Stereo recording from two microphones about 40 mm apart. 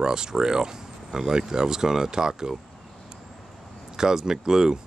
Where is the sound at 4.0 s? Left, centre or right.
Centre.